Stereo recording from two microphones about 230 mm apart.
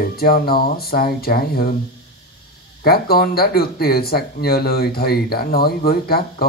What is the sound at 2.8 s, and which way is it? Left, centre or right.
Speech, left.